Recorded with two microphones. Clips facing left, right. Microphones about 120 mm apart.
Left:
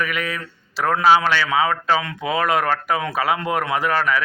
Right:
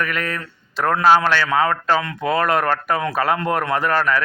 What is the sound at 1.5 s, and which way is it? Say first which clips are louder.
Speech: even; 50° right (ahead or behind).